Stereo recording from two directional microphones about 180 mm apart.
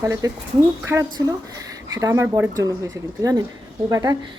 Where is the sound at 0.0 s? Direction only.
15° right (ahead or behind).